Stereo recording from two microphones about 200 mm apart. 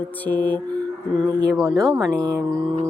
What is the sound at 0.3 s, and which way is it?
Music, 10° left (ahead or behind).